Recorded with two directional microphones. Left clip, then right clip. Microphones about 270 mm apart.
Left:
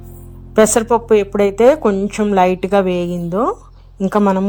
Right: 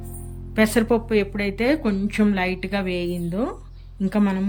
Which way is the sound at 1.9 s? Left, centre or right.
Centre.